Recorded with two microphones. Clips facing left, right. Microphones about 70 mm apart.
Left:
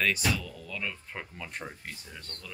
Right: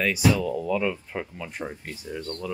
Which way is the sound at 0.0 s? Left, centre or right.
Centre.